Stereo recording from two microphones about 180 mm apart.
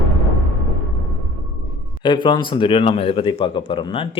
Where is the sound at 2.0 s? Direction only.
25° left (ahead or behind).